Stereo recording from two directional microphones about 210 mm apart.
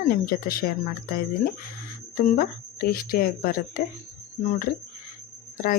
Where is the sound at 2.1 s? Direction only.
45° left (ahead or behind).